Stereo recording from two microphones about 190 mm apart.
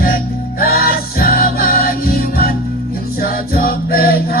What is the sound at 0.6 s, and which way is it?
Music, 50° left (ahead or behind).